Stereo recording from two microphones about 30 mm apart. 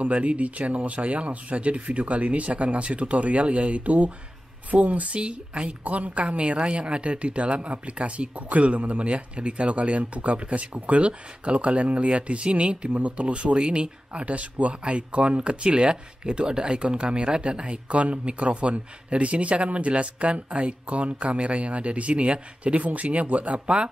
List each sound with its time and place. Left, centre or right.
0.0 s a woman's voice: right